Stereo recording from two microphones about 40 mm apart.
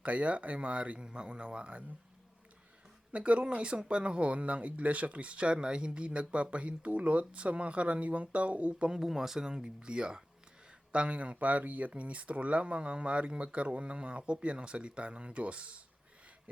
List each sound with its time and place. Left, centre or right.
0.0 s speech: right
0.9 s speech: right
3.1 s speech: right
9.0 s speech: centre
10.9 s speech: right